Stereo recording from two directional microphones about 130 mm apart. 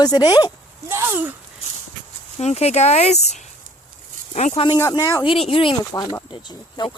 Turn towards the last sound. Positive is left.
turn(degrees=35)  # may be behind; listen again after turning